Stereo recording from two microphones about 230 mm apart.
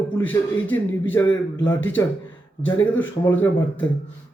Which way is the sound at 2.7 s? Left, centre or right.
Left.